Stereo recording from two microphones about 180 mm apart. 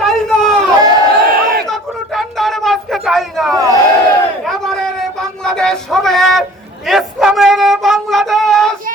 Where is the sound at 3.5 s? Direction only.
20° right (ahead or behind).